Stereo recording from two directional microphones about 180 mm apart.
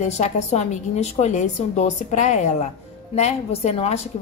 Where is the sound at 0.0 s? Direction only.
40° left (ahead or behind).